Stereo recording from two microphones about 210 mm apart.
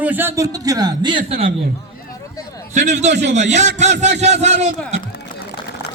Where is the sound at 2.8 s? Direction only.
35° right (ahead or behind).